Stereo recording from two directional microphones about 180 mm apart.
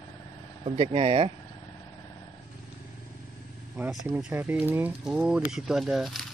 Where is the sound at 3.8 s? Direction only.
10° right (ahead or behind).